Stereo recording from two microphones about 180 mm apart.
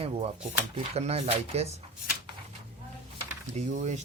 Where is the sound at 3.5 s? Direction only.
40° right (ahead or behind).